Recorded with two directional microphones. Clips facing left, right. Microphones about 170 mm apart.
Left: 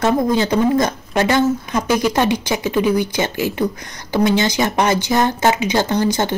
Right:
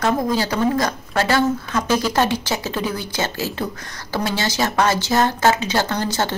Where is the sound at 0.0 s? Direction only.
20° left (ahead or behind).